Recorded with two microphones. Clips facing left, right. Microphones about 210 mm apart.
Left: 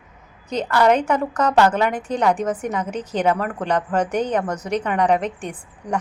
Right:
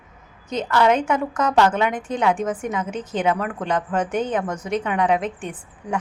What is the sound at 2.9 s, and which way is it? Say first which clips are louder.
Speech: left 1 dB; 35° left (ahead or behind).